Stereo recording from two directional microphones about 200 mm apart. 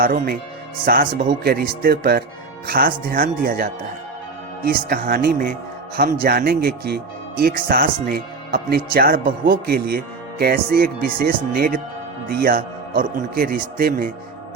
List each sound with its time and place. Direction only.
0.0 s speech: 45° right (ahead or behind)